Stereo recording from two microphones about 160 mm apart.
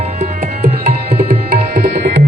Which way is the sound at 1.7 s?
90° right.